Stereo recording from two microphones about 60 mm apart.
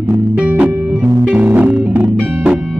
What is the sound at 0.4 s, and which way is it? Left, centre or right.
Music, centre.